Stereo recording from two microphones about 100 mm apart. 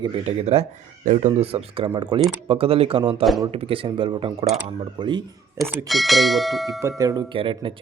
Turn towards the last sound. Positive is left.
turn(degrees=-60)  # may be behind; listen again after turning